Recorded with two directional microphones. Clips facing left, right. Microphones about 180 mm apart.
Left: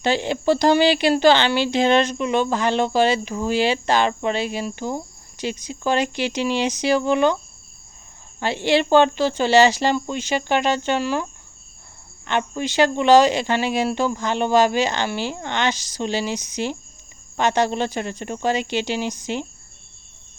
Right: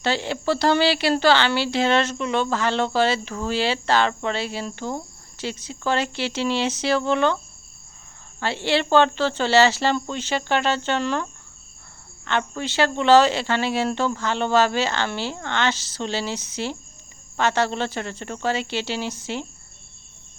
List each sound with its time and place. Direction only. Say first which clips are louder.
0.0 s speech: left 3 dB; 15° left (ahead or behind)
8.4 s speech: left 3 dB; 15° left (ahead or behind)